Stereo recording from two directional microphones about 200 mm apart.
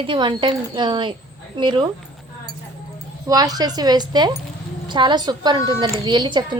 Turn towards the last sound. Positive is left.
turn(degrees=-20)  # may be behind; listen again after turning